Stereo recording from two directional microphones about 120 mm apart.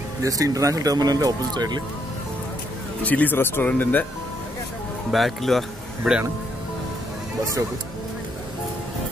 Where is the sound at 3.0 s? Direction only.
15° left (ahead or behind).